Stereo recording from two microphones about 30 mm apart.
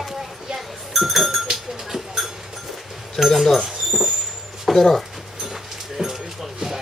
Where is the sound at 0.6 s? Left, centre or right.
Centre.